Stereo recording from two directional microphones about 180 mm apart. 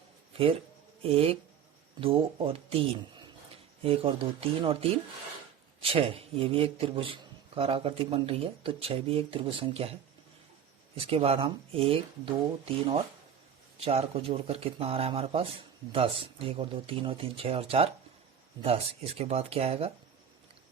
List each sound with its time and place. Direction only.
0.3 s speech: 30° right (ahead or behind)
10.9 s speech: 30° right (ahead or behind)
13.7 s speech: 35° right (ahead or behind)